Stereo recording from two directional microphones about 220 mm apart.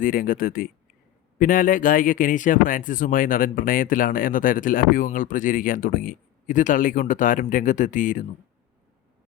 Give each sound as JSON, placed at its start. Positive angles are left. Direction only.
{"t": 0.0, "sound": "speech", "side_deg": 40}